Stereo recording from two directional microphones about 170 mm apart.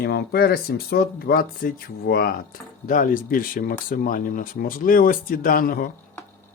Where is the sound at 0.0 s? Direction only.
75° left (ahead or behind).